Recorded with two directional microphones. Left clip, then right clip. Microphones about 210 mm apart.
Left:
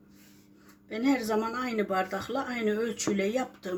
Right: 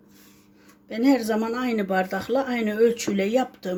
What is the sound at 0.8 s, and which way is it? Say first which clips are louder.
Speech: right 7 dB; 35° right (ahead or behind).